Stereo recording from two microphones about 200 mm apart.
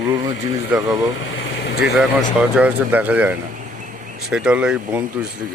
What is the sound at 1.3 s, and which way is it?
Vehicle, 55° left (ahead or behind).